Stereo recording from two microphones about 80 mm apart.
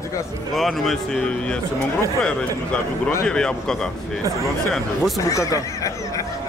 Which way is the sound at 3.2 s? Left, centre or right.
Centre.